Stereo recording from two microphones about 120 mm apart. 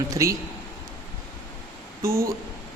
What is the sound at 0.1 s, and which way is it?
Speech, 25° right (ahead or behind).